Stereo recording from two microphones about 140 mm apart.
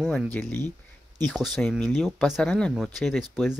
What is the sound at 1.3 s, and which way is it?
Speech, centre (ahead or behind).